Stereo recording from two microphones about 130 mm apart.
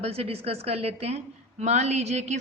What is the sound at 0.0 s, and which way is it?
A woman's voice, 50° right (ahead or behind).